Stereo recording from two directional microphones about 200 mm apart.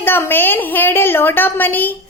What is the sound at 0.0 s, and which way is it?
A child's voice, 10° left (ahead or behind).